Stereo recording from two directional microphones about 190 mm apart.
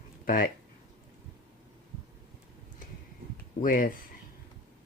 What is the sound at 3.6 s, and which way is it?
Speech, 45° left (ahead or behind).